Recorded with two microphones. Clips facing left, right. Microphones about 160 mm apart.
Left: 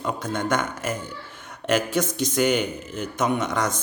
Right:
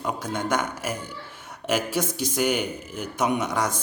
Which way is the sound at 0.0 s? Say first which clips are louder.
Left 1 dB; 10° right (ahead or behind).